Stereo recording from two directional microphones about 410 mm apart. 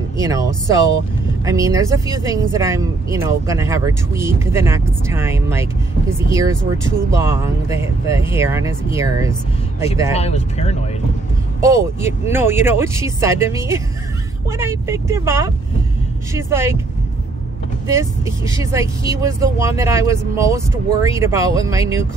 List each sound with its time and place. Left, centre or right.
0.2 s speech: centre
10.1 s speech: centre
11.6 s speech: centre
17.8 s speech: centre